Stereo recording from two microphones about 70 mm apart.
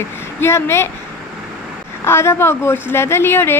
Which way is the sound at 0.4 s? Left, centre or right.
Left.